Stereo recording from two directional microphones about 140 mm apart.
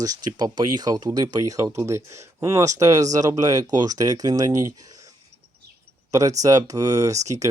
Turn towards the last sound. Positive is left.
turn(degrees=-25)  # may be behind; listen again after turning